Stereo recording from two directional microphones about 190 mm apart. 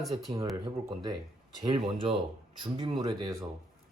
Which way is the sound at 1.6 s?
30° right (ahead or behind).